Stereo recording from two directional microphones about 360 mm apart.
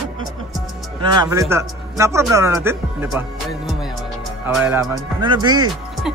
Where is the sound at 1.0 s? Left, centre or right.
Centre.